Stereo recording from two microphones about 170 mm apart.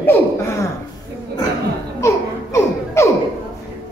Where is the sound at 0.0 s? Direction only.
15° left (ahead or behind).